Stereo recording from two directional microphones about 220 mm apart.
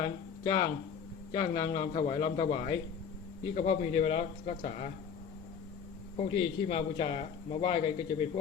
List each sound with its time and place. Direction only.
0.0 s a man's voice: 20° left (ahead or behind)
6.1 s a man's voice: 25° left (ahead or behind)